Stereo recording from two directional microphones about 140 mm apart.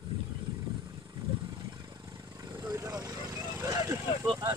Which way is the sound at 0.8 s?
20° right (ahead or behind).